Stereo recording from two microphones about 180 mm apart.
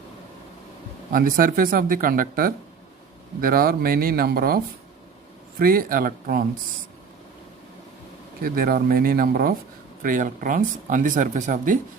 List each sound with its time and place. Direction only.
1.1 s speech: 55° right (ahead or behind)
8.4 s speech: 55° right (ahead or behind)